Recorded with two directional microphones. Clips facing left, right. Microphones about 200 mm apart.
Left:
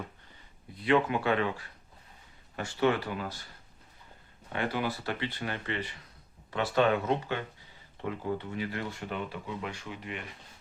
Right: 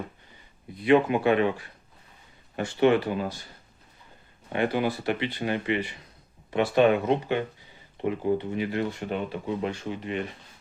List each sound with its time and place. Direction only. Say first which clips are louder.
0.8 s speech: right 6 dB; 15° right (ahead or behind)
4.4 s speech: right 6 dB; 20° right (ahead or behind)